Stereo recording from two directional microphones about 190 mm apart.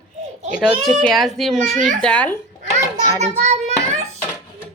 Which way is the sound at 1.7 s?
40° right (ahead or behind).